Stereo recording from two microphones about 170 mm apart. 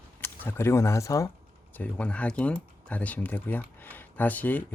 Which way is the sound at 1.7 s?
10° left (ahead or behind).